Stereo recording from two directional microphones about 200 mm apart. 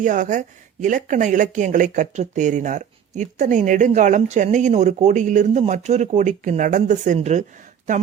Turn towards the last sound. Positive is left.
turn(degrees=-40)  # may be behind; listen again after turning